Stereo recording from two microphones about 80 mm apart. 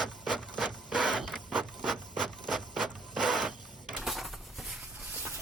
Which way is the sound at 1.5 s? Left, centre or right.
Centre.